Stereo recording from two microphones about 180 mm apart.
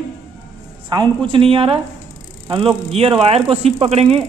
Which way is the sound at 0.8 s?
25° right (ahead or behind).